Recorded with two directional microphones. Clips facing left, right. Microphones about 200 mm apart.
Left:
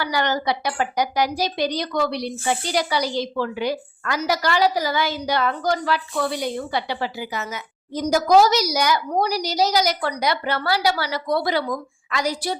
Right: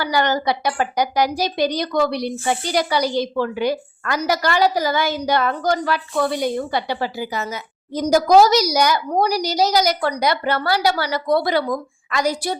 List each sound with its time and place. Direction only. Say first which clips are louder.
0.0 s a woman's voice: right 3 dB; 40° right (ahead or behind)